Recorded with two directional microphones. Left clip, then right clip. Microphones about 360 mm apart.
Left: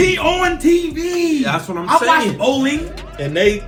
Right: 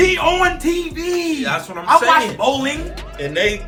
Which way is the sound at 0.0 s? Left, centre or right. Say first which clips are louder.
Even; centre.